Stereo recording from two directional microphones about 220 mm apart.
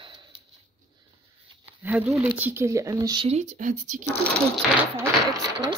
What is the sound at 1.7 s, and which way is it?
Speech, 5° right (ahead or behind).